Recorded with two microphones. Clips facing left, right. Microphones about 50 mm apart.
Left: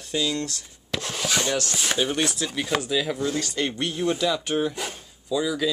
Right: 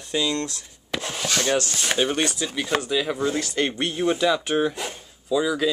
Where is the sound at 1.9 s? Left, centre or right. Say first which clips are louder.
Right 3 dB; centre.